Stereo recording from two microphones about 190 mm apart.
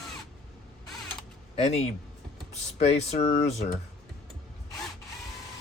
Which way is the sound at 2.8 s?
35° left (ahead or behind).